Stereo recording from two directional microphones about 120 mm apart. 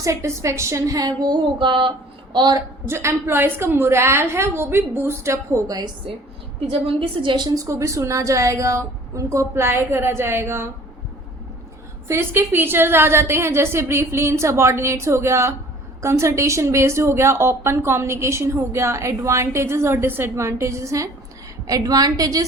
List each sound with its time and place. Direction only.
0.0 s a woman's voice: 25° right (ahead or behind)
2.8 s a woman's voice: 20° right (ahead or behind)
6.7 s a woman's voice: 50° right (ahead or behind); by 10.7 s 20° right (ahead or behind)
12.0 s a woman's voice: 20° right (ahead or behind)